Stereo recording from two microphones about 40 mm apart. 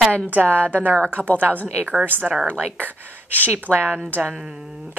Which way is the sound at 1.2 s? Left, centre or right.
Right.